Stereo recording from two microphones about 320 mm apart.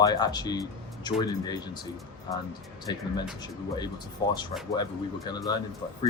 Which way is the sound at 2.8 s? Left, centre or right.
Centre.